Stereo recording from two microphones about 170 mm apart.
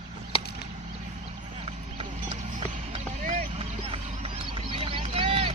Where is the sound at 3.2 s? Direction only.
40° right (ahead or behind).